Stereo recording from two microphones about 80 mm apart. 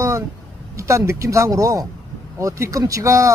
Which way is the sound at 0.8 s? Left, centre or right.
Right.